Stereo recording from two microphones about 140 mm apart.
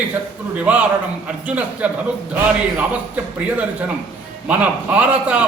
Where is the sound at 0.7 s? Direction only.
10° right (ahead or behind).